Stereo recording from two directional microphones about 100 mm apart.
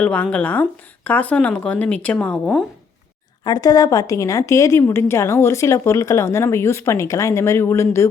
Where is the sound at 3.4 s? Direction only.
40° left (ahead or behind).